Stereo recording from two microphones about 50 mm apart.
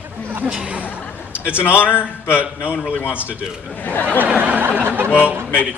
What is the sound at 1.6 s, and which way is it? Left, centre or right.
A man's voice, left.